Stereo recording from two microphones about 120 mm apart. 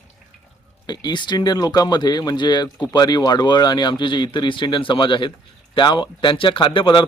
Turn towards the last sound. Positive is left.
turn(degrees=45)  # may be behind; listen again after turning